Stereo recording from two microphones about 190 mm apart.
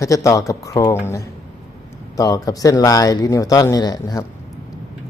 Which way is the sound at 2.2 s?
20° left (ahead or behind).